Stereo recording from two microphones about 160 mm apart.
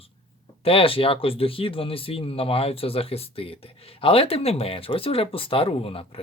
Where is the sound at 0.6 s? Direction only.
35° left (ahead or behind).